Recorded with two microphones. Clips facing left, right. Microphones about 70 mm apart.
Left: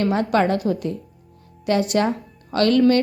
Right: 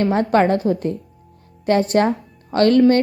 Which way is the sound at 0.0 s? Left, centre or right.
Right.